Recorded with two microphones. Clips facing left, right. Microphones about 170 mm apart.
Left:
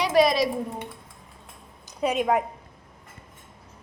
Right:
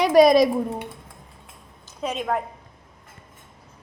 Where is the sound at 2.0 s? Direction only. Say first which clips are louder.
Left 3 dB; 10° left (ahead or behind).